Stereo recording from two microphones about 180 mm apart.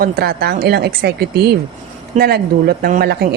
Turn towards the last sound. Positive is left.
turn(degrees=-60)  # may be behind; listen again after turning